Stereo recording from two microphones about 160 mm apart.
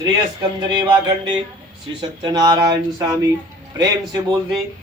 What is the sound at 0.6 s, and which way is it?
A man's voice, 25° right (ahead or behind).